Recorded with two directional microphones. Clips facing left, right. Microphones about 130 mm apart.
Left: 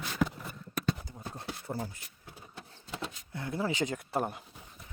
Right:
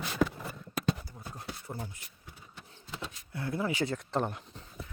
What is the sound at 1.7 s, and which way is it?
Speech, 20° left (ahead or behind).